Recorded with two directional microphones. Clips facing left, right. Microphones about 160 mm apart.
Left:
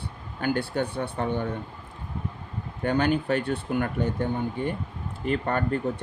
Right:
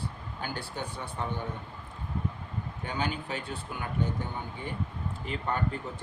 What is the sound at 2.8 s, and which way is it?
Speech, 65° left (ahead or behind).